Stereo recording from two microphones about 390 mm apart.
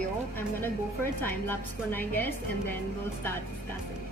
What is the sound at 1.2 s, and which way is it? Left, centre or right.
A woman's voice, centre.